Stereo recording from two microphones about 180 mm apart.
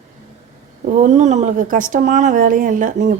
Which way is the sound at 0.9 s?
45° right (ahead or behind).